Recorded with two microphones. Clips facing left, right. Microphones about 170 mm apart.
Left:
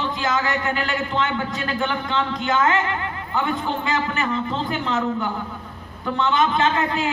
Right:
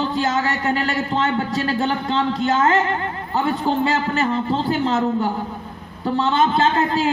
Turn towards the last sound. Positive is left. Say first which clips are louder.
# right 3 dB
turn(degrees=-35)  # may be behind; listen again after turning